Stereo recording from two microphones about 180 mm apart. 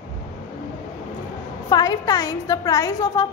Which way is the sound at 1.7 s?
20° left (ahead or behind).